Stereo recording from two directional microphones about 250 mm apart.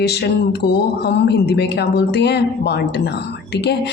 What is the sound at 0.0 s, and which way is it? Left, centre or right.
Speech, left.